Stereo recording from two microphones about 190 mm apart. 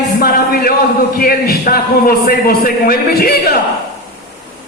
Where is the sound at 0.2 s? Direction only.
50° left (ahead or behind).